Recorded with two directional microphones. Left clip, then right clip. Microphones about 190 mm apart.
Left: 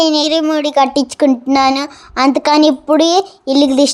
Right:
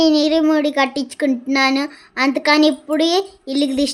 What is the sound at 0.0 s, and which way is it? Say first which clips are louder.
Speech: left 2 dB; 30° left (ahead or behind).